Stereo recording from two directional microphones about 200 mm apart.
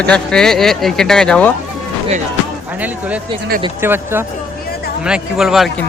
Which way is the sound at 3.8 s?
10° right (ahead or behind).